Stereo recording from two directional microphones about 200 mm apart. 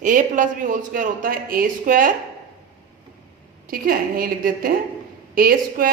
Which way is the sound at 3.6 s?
45° right (ahead or behind).